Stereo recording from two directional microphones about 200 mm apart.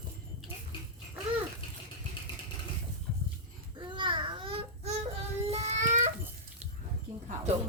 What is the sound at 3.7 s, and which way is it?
Child singing, 25° right (ahead or behind).